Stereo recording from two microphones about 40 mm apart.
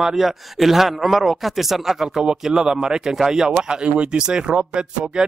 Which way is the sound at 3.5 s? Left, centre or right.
Right.